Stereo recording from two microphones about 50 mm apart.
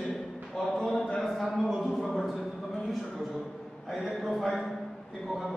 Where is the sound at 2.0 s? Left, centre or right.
Centre.